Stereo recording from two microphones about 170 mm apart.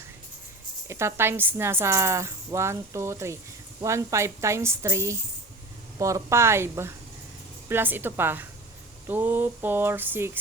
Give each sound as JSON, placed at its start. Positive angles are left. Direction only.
{"t": 0.9, "sound": "speech", "side_deg": -15}